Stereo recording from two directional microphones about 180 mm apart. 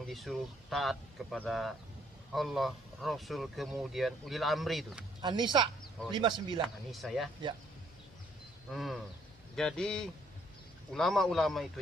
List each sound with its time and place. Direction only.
0.0 s speech: centre (ahead or behind)
5.2 s speech: 25° right (ahead or behind)
6.9 s speech: centre (ahead or behind)
8.7 s speech: centre (ahead or behind)